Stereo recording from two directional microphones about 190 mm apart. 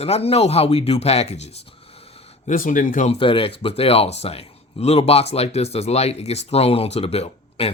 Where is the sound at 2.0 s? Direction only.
30° left (ahead or behind).